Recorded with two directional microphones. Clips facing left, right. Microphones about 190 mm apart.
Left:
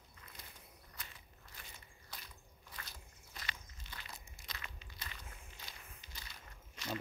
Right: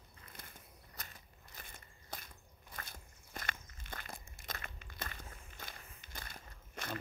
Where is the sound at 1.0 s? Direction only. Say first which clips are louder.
Right 2 dB; 45° right (ahead or behind).